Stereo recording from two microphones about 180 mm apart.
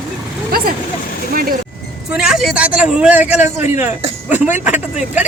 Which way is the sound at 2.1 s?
5° right (ahead or behind).